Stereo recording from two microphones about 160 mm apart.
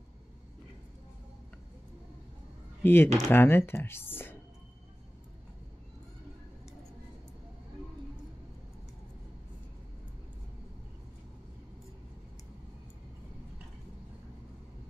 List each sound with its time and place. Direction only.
2.8 s speech: 15° left (ahead or behind)